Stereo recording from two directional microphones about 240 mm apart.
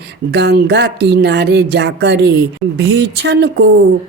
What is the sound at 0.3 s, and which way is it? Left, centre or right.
Speech, right.